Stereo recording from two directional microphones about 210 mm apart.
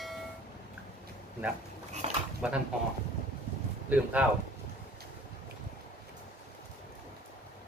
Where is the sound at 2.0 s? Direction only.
30° right (ahead or behind).